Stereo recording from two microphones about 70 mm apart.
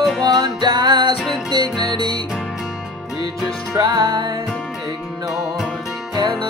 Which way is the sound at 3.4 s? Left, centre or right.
Right.